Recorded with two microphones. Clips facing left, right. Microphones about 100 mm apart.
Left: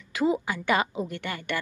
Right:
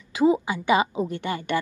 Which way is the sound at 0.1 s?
20° right (ahead or behind).